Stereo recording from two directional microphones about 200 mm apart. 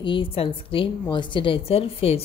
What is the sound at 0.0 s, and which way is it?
A woman's voice, 25° left (ahead or behind).